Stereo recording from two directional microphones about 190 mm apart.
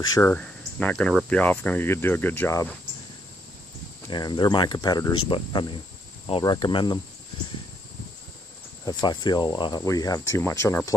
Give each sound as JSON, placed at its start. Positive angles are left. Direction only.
{"t": 0.1, "sound": "speech", "side_deg": 10}
{"t": 4.1, "sound": "speech", "side_deg": 25}
{"t": 8.8, "sound": "speech", "side_deg": 20}